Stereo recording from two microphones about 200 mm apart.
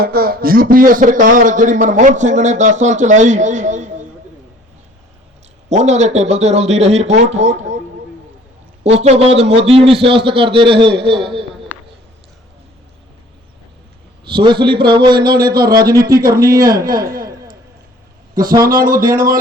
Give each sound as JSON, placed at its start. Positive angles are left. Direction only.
{"t": 0.0, "sound": "a man's voice", "side_deg": -50}
{"t": 5.6, "sound": "a man's voice", "side_deg": -35}
{"t": 8.8, "sound": "a man's voice", "side_deg": -35}
{"t": 14.3, "sound": "a man's voice", "side_deg": -25}
{"t": 15.4, "sound": "speech", "side_deg": -50}
{"t": 15.9, "sound": "a man's voice", "side_deg": -15}
{"t": 18.6, "sound": "speech", "side_deg": -45}